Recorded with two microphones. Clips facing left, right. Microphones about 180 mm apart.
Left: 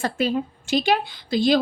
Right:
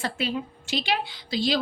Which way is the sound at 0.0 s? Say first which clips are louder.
Left 6 dB; 45° left (ahead or behind).